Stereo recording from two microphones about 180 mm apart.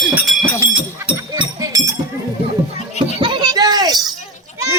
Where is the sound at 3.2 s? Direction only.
25° right (ahead or behind).